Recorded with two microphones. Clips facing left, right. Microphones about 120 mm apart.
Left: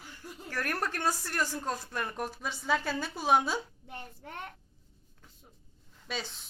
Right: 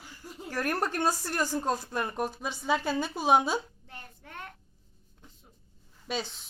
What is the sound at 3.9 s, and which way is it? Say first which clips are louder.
Speech: left 3 dB; 25° left (ahead or behind).